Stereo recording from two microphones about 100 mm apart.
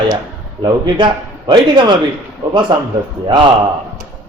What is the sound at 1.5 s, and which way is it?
A man's voice, 50° right (ahead or behind).